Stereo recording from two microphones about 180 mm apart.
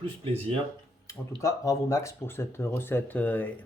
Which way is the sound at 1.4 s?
15° left (ahead or behind).